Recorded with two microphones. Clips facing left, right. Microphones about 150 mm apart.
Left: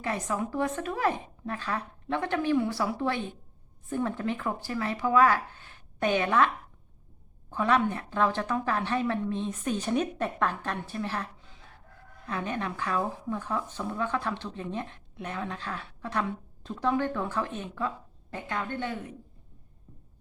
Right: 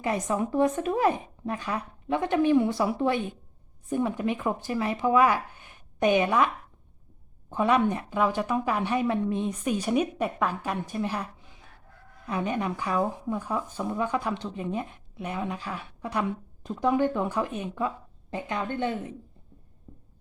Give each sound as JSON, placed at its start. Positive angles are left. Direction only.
{"t": 0.0, "sound": "speech", "side_deg": -20}
{"t": 7.5, "sound": "speech", "side_deg": -15}
{"t": 12.3, "sound": "speech", "side_deg": -15}